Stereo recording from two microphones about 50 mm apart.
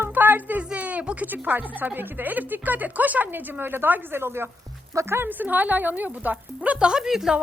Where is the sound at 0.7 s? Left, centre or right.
Right.